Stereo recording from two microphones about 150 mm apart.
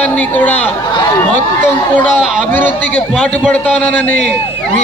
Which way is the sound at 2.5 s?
10° left (ahead or behind).